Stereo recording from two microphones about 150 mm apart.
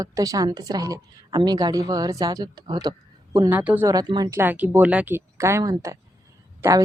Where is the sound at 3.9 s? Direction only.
25° right (ahead or behind).